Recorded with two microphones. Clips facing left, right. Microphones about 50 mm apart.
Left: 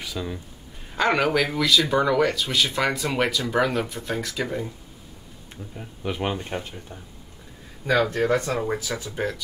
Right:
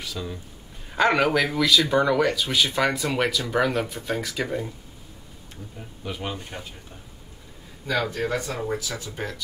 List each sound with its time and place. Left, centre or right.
0.0 s speech: centre
0.9 s speech: centre
5.8 s speech: centre
6.2 s speech: left
7.8 s speech: left
8.5 s speech: left